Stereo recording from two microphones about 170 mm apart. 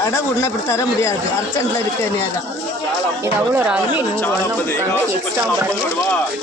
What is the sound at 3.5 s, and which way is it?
Speech, 10° right (ahead or behind).